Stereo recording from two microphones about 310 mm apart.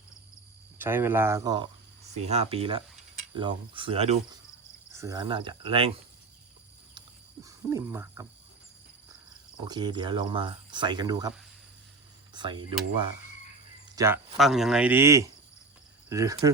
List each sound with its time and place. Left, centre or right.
0.8 s speech: centre
7.4 s speech: centre
9.6 s speech: centre
13.9 s speech: centre